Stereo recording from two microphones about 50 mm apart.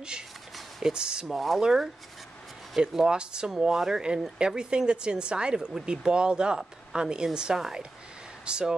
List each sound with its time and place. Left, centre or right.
0.6 s a sound: centre
0.9 s speech: centre
1.3 s speech: centre
1.6 s a woman's voice: centre